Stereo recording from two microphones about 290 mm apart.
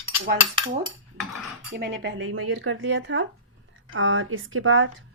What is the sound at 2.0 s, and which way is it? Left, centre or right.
Speech, right.